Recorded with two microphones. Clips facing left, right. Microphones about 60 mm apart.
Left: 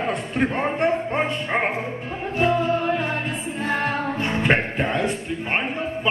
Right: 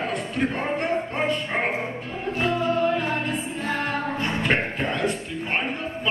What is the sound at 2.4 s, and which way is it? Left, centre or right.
Music, left.